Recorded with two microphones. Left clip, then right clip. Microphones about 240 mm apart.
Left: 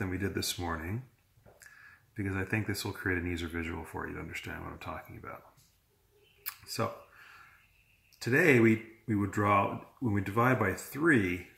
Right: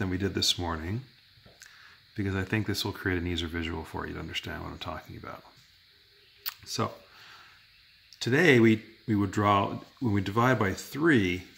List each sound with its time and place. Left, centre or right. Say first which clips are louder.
0.0 s speech: right 6 dB; right
2.1 s speech: right 3 dB; right
6.4 s camera: right 3 dB; right
8.2 s speech: right 3 dB; right